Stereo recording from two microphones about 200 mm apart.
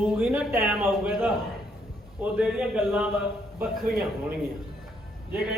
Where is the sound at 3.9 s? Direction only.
45° right (ahead or behind).